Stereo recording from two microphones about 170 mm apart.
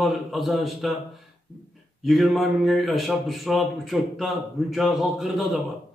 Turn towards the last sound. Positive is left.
turn(degrees=0)  # may be behind; listen again after turning